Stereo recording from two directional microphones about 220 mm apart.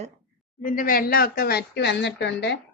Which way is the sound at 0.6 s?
40° left (ahead or behind).